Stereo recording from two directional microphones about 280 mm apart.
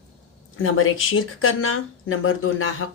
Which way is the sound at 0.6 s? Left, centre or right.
Left.